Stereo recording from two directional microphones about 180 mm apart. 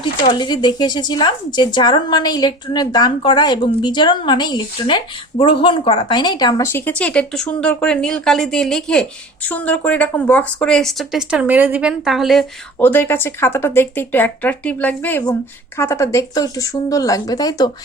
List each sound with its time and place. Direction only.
0.2 s speech: 25° left (ahead or behind)